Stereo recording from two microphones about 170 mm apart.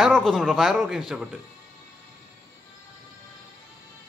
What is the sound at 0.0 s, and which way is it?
Speech, centre (ahead or behind).